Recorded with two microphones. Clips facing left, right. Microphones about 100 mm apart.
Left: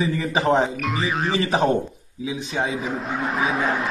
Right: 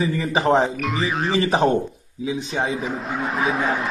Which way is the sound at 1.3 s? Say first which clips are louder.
Right 3 dB; 20° right (ahead or behind).